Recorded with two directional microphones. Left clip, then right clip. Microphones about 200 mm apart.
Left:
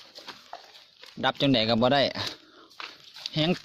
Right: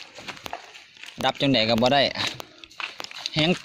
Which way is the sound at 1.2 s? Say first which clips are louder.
Right 2 dB; 45° left (ahead or behind).